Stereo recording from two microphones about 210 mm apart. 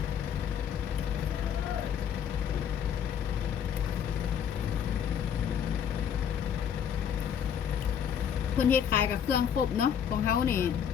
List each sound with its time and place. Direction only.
8.5 s a woman's voice: 10° left (ahead or behind)
9.3 s speech: 50° left (ahead or behind)
10.4 s a woman's voice: 10° left (ahead or behind)